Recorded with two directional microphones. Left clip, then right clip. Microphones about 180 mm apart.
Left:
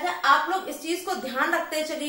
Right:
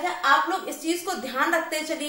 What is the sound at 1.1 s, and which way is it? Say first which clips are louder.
Speech: even; 20° right (ahead or behind).